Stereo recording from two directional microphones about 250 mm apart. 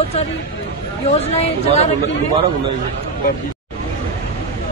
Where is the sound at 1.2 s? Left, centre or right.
Left.